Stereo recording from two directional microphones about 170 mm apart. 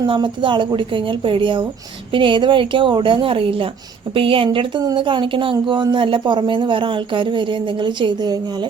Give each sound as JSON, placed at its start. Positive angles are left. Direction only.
{"t": 0.0, "sound": "a woman's voice", "side_deg": -30}